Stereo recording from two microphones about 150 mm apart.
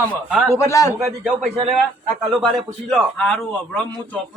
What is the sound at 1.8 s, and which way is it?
A man's voice, centre (ahead or behind).